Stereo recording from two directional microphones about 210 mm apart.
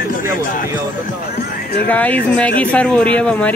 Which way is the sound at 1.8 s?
5° left (ahead or behind).